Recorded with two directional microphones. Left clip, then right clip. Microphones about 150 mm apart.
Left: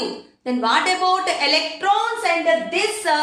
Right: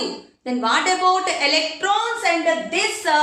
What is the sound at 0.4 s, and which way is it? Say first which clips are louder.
A woman's voice: left 1 dB; 20° left (ahead or behind).